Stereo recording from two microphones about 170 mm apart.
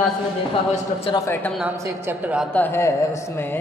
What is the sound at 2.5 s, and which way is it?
A man's voice, 15° left (ahead or behind).